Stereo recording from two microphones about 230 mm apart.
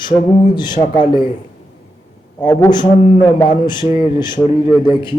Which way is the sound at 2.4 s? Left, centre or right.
Centre.